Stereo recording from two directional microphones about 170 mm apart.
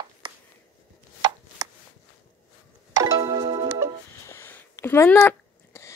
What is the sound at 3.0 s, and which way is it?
Music, 20° right (ahead or behind).